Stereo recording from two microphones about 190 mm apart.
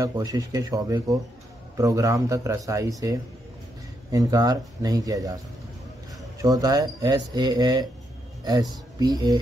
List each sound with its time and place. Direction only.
0.0 s a man's voice: 20° right (ahead or behind)
6.4 s speech: 20° right (ahead or behind)
9.0 s speech: 20° right (ahead or behind)